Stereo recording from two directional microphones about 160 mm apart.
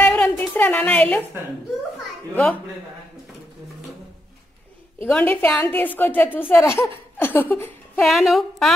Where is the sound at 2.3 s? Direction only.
10° left (ahead or behind).